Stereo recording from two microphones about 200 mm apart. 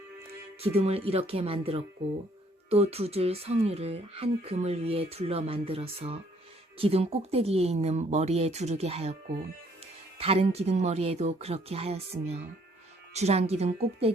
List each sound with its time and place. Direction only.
0.6 s speech: 30° right (ahead or behind)
10.2 s speech: 30° right (ahead or behind)